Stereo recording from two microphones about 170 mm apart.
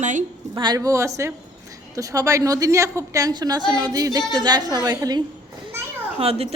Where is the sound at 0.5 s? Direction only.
25° right (ahead or behind).